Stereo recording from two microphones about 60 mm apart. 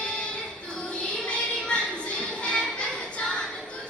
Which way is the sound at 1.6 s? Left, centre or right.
Centre.